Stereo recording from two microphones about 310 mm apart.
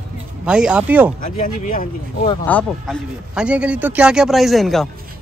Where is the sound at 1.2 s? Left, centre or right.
Left.